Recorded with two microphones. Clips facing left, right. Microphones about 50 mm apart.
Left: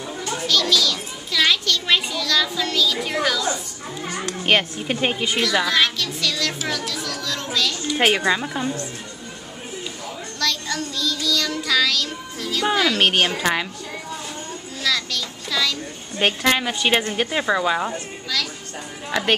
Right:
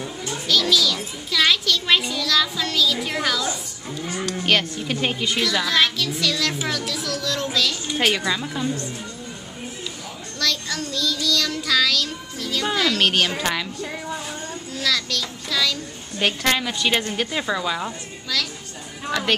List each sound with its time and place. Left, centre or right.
0.5 s a child's voice: centre
4.5 s a woman's voice: left; by 7.7 s centre
8.0 s a woman's voice: left
10.4 s child singing: centre
12.6 s speech: centre
12.9 s a woman's voice: left
14.8 s a child's voice: centre
16.4 s a woman's voice: centre